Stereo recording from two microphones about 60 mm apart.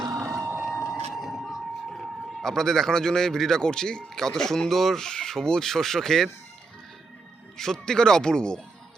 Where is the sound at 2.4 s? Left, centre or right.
Centre.